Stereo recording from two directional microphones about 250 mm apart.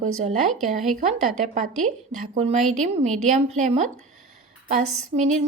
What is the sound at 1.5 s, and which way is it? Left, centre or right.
A woman's voice, right.